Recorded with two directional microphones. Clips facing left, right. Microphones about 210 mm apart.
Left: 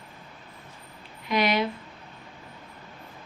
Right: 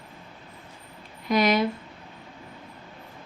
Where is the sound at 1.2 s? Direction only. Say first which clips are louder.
Right 3 dB; 40° right (ahead or behind).